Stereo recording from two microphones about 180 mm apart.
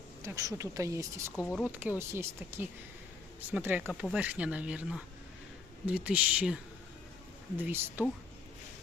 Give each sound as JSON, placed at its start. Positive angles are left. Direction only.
{"t": 0.2, "sound": "speech", "side_deg": -15}